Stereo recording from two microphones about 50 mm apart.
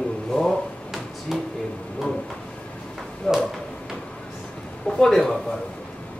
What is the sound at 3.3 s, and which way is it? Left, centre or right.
Speech, centre.